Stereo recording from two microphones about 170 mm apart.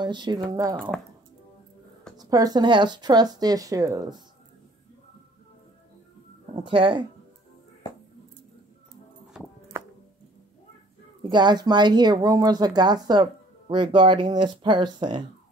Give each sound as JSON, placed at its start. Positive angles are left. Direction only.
{"t": 0.0, "sound": "speech", "side_deg": -25}
{"t": 2.1, "sound": "speech", "side_deg": -20}
{"t": 6.5, "sound": "speech", "side_deg": -30}
{"t": 9.7, "sound": "music", "side_deg": -15}
{"t": 11.2, "sound": "speech", "side_deg": -25}